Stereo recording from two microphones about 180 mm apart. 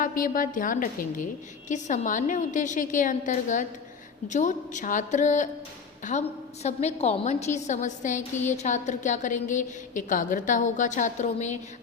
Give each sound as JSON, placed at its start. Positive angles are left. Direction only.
{"t": 0.0, "sound": "a woman's voice", "side_deg": 50}